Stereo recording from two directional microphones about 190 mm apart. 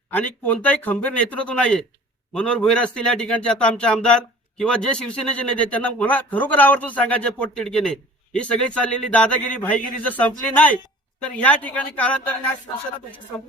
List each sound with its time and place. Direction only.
0.1 s a man's voice: 10° left (ahead or behind)